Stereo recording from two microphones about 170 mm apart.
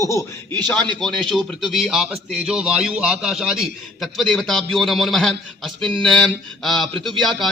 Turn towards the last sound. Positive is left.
turn(degrees=0)  # may be behind; listen again after turning